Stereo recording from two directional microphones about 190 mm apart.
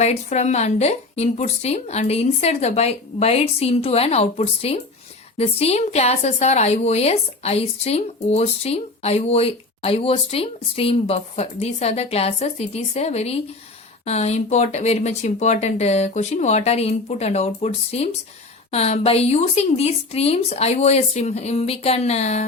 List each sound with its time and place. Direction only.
0.0 s a woman's voice: 35° left (ahead or behind)